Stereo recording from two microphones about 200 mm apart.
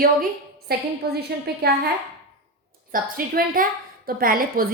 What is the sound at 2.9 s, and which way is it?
A woman's voice, 45° right (ahead or behind).